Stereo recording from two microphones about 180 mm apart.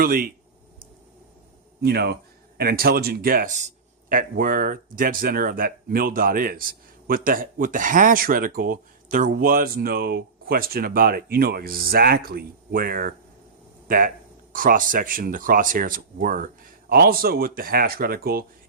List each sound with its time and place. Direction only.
0.0 s speech: 55° right (ahead or behind)
1.8 s speech: 65° right (ahead or behind)